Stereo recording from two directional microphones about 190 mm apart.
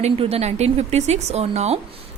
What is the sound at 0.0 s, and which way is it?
A woman's voice, 30° right (ahead or behind).